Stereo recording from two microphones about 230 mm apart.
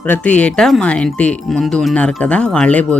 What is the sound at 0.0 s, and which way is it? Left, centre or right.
Speech, centre.